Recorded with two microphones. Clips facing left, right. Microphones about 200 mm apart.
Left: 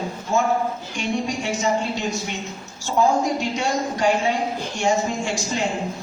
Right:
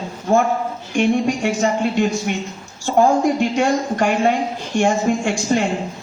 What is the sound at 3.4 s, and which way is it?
A man's voice, 55° right (ahead or behind).